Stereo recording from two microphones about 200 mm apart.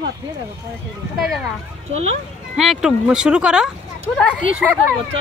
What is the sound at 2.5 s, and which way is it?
Speech, centre (ahead or behind).